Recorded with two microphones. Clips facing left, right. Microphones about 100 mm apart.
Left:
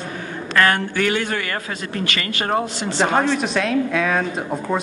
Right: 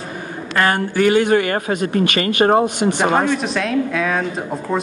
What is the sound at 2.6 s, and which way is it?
Speech, 15° right (ahead or behind).